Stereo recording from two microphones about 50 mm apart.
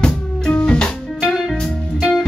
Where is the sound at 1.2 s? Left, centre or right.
Centre.